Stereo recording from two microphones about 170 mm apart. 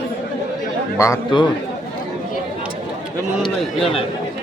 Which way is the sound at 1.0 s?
15° left (ahead or behind).